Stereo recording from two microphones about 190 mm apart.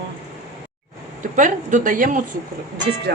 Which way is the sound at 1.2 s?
40° right (ahead or behind).